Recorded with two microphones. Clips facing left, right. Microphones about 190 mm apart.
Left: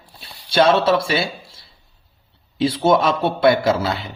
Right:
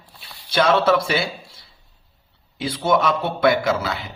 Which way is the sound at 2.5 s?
25° left (ahead or behind).